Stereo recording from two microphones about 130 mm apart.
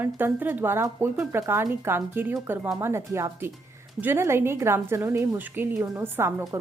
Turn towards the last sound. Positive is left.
turn(degrees=-20)  # may be behind; listen again after turning